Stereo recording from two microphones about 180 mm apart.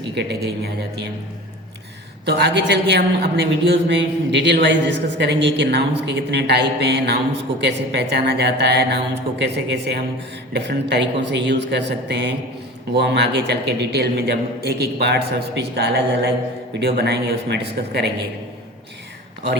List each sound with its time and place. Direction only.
0.1 s a man's voice: 70° right (ahead or behind)
2.2 s a man's voice: 70° right (ahead or behind)
3.8 s a man's voice: 80° right